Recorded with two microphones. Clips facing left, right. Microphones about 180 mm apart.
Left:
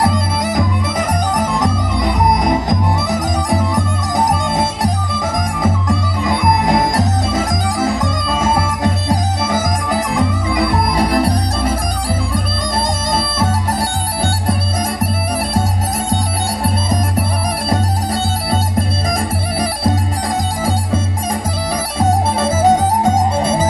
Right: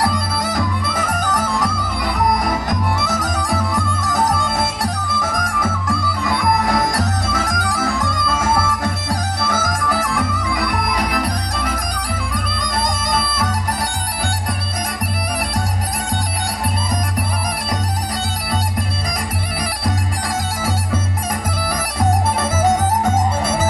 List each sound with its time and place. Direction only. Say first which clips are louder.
0.0 s music: left 4 dB; 20° left (ahead or behind)
22.6 s music: left 4 dB; 30° left (ahead or behind)